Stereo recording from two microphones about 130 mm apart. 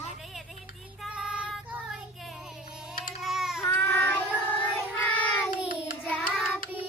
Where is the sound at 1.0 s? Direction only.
5° right (ahead or behind).